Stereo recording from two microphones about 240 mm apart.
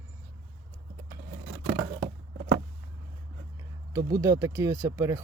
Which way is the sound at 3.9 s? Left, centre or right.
Centre.